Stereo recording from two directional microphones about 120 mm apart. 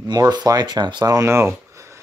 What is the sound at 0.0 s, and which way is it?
Speech, 35° right (ahead or behind).